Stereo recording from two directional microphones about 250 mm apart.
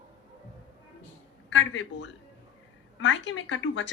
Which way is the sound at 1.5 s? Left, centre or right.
Left.